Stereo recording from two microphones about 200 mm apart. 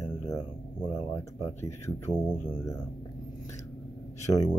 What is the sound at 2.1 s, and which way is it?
Speech, 10° right (ahead or behind).